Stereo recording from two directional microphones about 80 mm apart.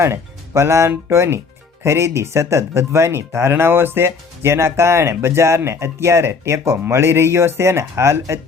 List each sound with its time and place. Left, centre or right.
0.0 s speech: right